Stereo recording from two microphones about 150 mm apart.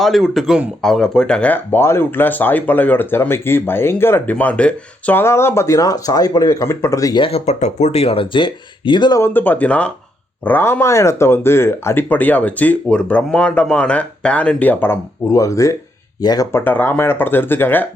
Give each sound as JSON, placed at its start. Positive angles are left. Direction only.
{"t": 0.0, "sound": "speech", "side_deg": 0}
{"t": 7.3, "sound": "speech", "side_deg": 45}
{"t": 9.2, "sound": "speech", "side_deg": 10}
{"t": 16.5, "sound": "speech", "side_deg": 15}